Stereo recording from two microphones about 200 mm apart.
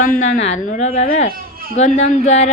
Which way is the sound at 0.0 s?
40° left (ahead or behind).